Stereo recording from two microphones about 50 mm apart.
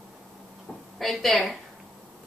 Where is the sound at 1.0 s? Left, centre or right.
Centre.